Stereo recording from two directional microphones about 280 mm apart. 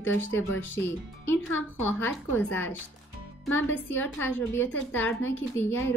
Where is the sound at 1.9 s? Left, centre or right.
Centre.